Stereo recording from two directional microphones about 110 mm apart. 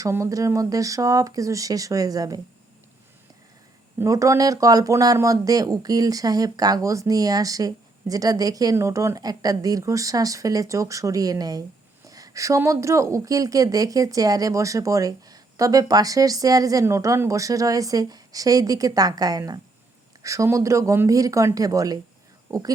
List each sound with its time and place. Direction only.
0.0 s a woman's voice: 30° right (ahead or behind)
4.0 s a woman's voice: 30° right (ahead or behind)